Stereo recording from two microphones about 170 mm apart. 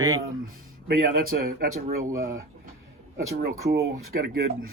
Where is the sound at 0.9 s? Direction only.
65° right (ahead or behind).